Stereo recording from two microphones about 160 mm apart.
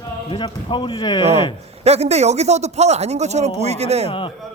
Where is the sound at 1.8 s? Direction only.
40° right (ahead or behind).